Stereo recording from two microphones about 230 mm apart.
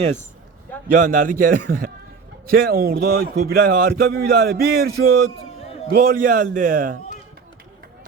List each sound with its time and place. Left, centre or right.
1.0 s speech: right